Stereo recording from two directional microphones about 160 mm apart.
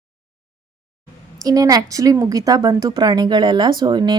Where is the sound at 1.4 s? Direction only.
20° right (ahead or behind).